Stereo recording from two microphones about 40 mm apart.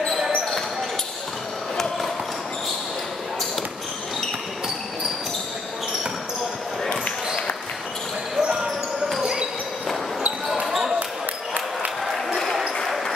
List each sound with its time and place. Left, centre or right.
8.4 s basketball bounce: right
12.8 s basketball bounce: centre